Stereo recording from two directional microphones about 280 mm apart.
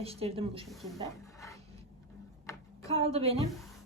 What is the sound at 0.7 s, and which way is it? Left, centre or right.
Speech, centre.